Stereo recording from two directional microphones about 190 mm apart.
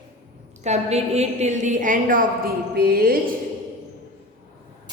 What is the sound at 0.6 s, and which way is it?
A woman's voice, 35° right (ahead or behind).